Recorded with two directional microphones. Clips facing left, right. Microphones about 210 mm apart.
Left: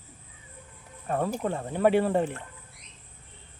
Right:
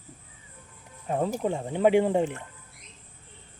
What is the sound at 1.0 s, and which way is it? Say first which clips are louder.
Speech: right 1 dB; 15° right (ahead or behind).